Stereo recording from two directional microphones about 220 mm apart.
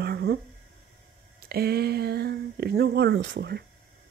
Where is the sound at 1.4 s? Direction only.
45° right (ahead or behind).